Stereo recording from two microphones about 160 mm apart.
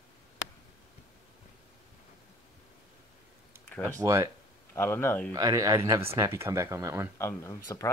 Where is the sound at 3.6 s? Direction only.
10° left (ahead or behind).